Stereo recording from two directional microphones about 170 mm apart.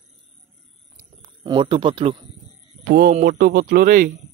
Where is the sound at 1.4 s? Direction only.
30° right (ahead or behind).